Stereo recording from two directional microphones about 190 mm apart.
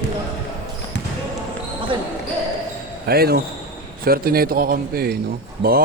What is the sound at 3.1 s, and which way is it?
Speech, 55° right (ahead or behind).